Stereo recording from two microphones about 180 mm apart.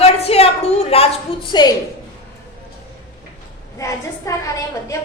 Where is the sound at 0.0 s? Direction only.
35° left (ahead or behind).